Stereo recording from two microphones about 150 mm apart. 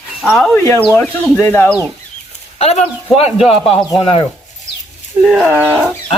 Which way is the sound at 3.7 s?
40° left (ahead or behind).